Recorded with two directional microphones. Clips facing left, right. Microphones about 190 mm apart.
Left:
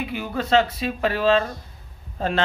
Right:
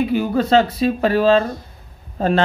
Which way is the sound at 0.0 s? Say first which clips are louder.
Right 9 dB; 40° right (ahead or behind).